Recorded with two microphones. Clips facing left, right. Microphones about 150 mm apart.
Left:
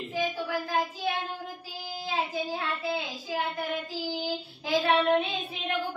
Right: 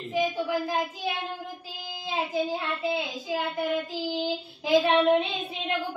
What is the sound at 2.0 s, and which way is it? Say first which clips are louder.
Child singing: right 3 dB; 20° right (ahead or behind).